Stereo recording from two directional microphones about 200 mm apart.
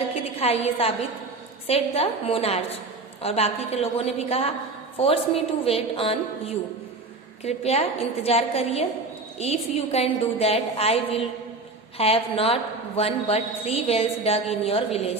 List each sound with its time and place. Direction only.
0.3 s a woman's voice: 30° left (ahead or behind)